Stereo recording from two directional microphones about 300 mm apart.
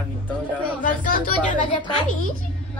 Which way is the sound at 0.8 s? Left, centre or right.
Left.